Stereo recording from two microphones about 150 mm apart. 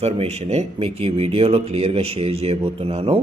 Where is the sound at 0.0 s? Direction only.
45° right (ahead or behind).